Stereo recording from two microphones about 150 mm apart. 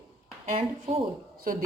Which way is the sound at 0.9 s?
35° right (ahead or behind).